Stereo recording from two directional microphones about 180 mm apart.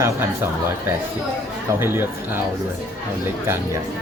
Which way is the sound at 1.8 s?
10° right (ahead or behind).